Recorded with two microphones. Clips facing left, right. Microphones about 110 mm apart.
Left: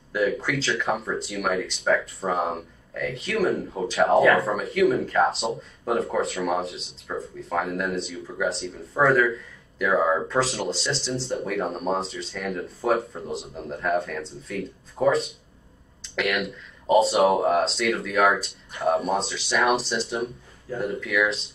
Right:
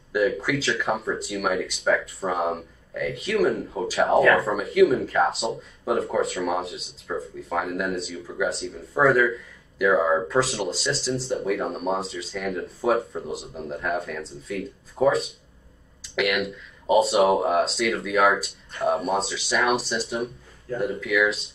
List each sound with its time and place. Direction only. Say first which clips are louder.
0.1 s speech: right 2 dB; centre (ahead or behind)